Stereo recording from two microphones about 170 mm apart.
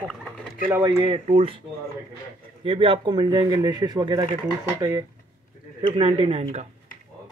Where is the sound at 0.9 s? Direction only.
35° right (ahead or behind).